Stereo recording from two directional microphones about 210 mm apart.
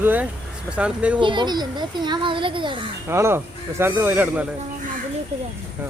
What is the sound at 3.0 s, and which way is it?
Speech, 10° right (ahead or behind).